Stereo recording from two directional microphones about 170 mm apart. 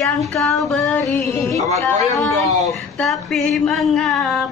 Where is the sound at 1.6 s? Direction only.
40° right (ahead or behind).